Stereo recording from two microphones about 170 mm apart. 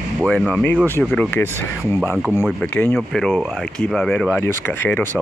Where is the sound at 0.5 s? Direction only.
10° left (ahead or behind).